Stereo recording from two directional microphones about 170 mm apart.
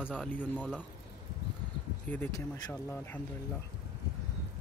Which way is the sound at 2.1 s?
10° left (ahead or behind).